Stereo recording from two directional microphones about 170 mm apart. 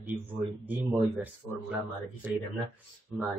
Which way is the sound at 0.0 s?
10° right (ahead or behind).